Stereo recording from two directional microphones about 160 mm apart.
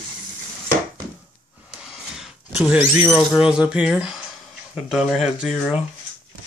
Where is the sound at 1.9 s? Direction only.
5° right (ahead or behind).